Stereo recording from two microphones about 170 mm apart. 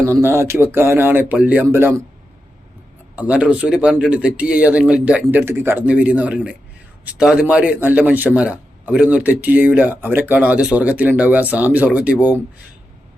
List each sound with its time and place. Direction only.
0.0 s a man's voice: 15° right (ahead or behind)
3.2 s a man's voice: 5° right (ahead or behind)